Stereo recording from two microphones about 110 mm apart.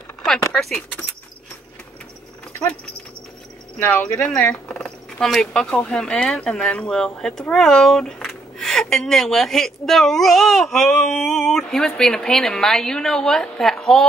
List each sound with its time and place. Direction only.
0.2 s speech: 5° left (ahead or behind)
3.8 s speech: 20° left (ahead or behind)
4.5 s speech: 5° left (ahead or behind)